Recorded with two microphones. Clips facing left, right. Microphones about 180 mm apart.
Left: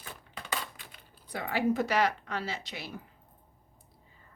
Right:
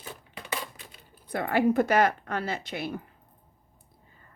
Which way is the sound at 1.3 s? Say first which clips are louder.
Right 5 dB; 55° right (ahead or behind).